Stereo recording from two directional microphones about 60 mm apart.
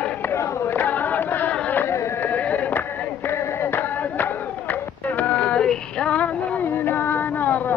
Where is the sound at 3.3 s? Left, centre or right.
Left.